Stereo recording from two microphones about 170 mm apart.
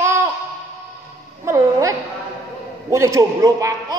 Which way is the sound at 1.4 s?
20° right (ahead or behind).